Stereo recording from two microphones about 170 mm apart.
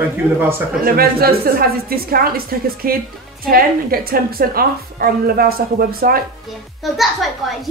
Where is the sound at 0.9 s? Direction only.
60° right (ahead or behind).